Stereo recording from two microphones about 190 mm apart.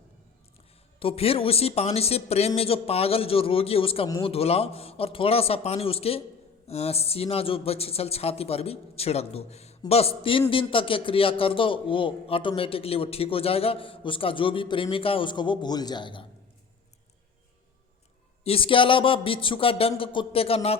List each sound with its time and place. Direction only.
0.9 s a man's voice: 30° left (ahead or behind)
18.4 s a man's voice: 30° left (ahead or behind)